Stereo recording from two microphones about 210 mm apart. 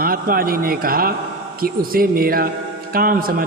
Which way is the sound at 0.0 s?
45° right (ahead or behind).